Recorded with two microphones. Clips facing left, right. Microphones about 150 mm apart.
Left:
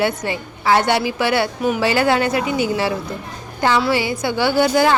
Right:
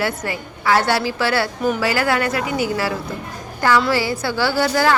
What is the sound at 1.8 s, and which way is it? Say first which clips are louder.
A woman's voice: left 5 dB; 25° left (ahead or behind).